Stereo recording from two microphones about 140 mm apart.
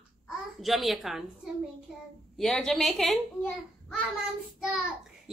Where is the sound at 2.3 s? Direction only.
5° left (ahead or behind).